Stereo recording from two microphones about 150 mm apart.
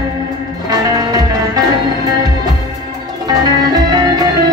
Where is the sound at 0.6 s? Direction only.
25° right (ahead or behind).